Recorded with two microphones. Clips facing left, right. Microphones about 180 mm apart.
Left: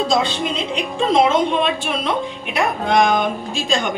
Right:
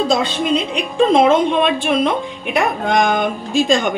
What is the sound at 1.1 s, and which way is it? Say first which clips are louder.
A woman's voice: right 1 dB; 55° right (ahead or behind).